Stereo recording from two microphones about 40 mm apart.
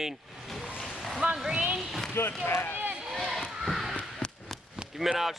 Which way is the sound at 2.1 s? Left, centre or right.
Left.